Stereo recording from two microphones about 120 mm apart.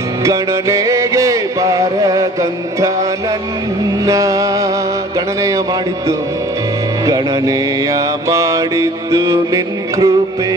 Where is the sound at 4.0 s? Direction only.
30° right (ahead or behind).